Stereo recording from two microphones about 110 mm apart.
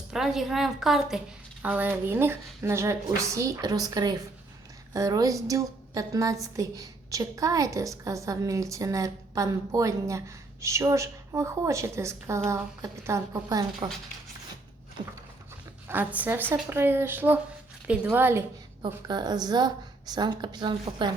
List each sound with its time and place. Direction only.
0.1 s a woman's voice: centre (ahead or behind)
1.6 s a woman's voice: 15° right (ahead or behind); by 13.7 s 30° right (ahead or behind)
15.9 s a woman's voice: 15° right (ahead or behind)
18.8 s a woman's voice: 40° right (ahead or behind)